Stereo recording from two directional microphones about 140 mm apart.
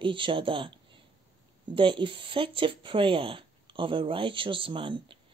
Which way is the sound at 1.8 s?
35° right (ahead or behind).